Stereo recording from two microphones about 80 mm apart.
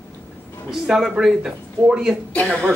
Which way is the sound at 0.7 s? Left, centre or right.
Centre.